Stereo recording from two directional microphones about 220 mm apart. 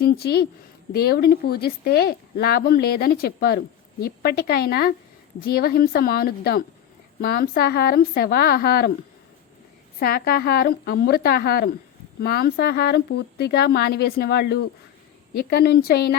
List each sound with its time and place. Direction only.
0.0 s speech: 45° left (ahead or behind)
10.0 s speech: 40° left (ahead or behind)